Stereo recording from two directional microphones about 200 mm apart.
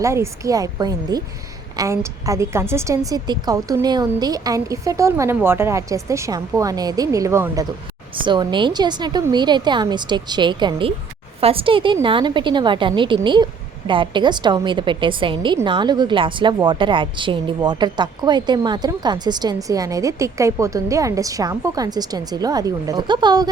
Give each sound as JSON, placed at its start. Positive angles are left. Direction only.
{"t": 0.0, "sound": "a woman's voice", "side_deg": -15}